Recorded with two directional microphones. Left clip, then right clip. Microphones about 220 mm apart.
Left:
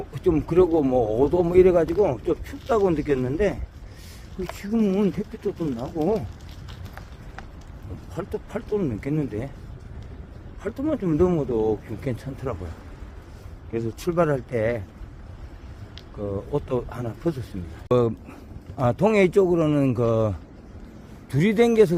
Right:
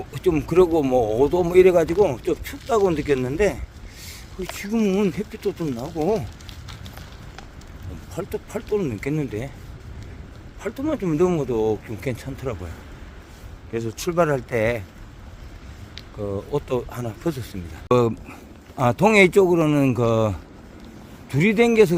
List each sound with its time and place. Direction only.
0.1 s speech: 15° right (ahead or behind)
4.6 s speech: 15° right (ahead or behind)
8.1 s speech: 15° right (ahead or behind)
10.6 s speech: 10° right (ahead or behind)
13.7 s speech: 10° right (ahead or behind)
16.2 s a man's voice: 20° right (ahead or behind)